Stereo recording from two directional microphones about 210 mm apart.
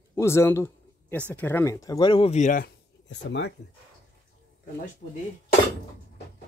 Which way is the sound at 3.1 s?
55° left (ahead or behind).